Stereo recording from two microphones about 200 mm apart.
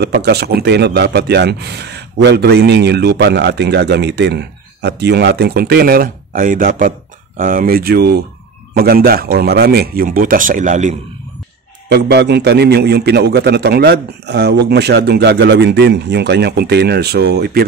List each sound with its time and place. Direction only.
0.0 s a man's voice: 55° right (ahead or behind); by 11.0 s 40° right (ahead or behind)
11.9 s a man's voice: 55° right (ahead or behind)